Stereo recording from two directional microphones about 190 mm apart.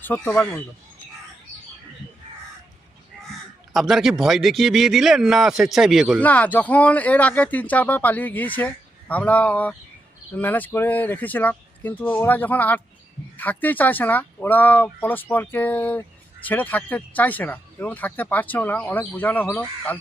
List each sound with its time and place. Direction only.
0.0 s speech: 5° left (ahead or behind)
3.7 s a man's voice: centre (ahead or behind)
6.2 s speech: 10° left (ahead or behind)